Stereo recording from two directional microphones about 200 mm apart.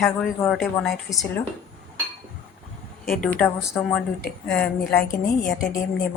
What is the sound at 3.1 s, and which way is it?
A woman's voice, 5° left (ahead or behind).